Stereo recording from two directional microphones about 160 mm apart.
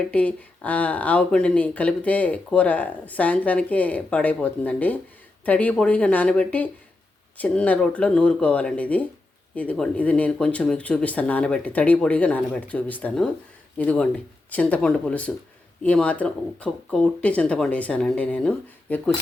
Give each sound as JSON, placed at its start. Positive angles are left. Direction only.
{"t": 0.0, "sound": "speech", "side_deg": 10}